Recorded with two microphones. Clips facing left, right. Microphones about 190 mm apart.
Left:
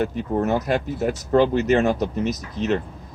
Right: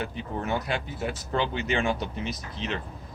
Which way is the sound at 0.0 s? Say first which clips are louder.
Left 10 dB; 45° left (ahead or behind).